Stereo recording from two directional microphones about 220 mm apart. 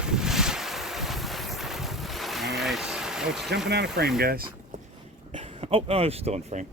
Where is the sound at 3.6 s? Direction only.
50° right (ahead or behind).